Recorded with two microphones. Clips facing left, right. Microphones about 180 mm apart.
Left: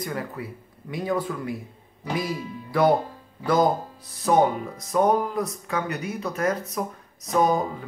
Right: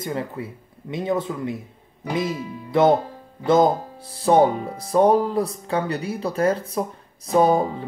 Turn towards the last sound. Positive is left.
turn(degrees=-30)  # may be behind; listen again after turning